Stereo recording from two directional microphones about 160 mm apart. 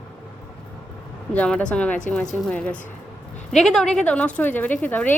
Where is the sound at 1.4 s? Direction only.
5° left (ahead or behind).